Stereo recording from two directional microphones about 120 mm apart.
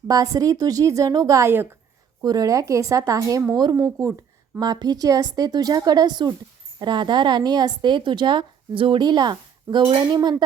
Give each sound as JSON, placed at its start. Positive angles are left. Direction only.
{"t": 0.1, "sound": "a woman's voice", "side_deg": -30}